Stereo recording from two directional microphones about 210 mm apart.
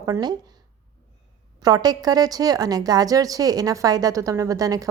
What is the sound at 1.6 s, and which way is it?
A woman's voice, 20° right (ahead or behind).